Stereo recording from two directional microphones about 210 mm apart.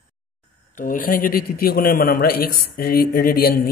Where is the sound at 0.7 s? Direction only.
40° left (ahead or behind).